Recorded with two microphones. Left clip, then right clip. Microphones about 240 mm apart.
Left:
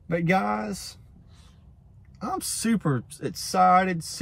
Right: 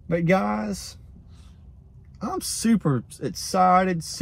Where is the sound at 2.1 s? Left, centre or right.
Left.